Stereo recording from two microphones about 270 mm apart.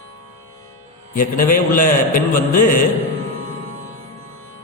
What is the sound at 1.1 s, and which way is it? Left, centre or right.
A man's voice, left.